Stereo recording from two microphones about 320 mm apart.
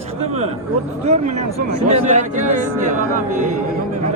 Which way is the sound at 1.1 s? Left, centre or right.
Right.